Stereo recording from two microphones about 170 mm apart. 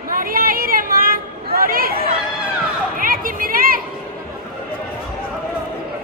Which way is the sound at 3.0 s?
55° right (ahead or behind).